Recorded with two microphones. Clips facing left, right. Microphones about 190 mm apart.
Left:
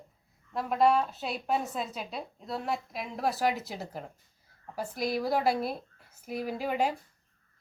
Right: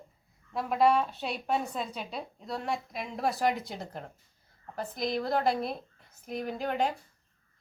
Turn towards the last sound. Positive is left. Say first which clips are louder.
# left 1 dB
turn(degrees=5)  # may be behind; listen again after turning